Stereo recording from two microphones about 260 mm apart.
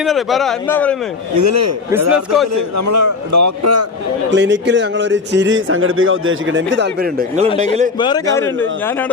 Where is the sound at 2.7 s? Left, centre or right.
Right.